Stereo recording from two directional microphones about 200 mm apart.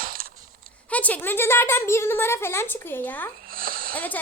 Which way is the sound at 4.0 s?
10° left (ahead or behind).